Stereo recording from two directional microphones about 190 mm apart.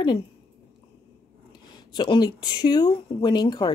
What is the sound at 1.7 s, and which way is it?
Speech, 25° left (ahead or behind).